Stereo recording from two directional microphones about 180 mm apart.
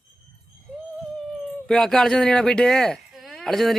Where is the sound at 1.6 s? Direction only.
5° left (ahead or behind).